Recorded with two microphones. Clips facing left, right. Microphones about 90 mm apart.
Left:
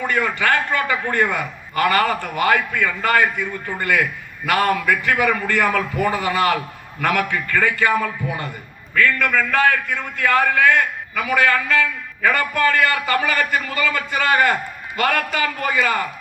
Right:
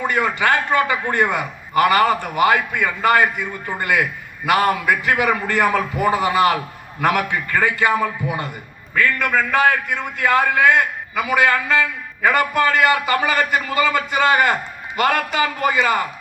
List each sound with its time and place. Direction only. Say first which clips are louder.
0.0 s a man's voice: right 1 dB; 20° right (ahead or behind)